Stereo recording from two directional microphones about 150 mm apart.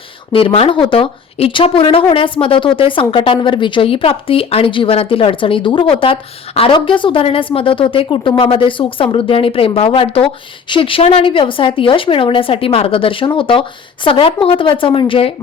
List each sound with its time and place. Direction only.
0.3 s speech: 40° left (ahead or behind)